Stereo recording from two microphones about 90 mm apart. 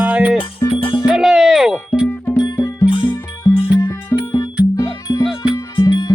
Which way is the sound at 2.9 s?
70° left (ahead or behind).